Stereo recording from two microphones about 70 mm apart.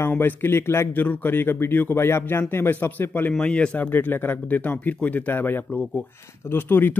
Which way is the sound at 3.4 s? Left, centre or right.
Centre.